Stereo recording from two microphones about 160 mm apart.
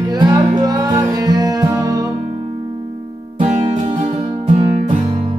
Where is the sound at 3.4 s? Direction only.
35° right (ahead or behind).